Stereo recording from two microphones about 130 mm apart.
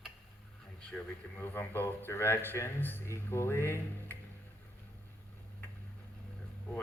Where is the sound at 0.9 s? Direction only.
15° left (ahead or behind).